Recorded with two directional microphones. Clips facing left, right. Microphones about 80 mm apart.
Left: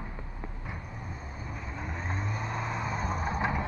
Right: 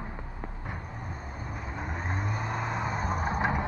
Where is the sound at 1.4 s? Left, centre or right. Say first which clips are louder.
Right 2 dB; right.